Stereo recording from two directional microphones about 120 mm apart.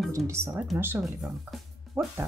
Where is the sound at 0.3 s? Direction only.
20° right (ahead or behind).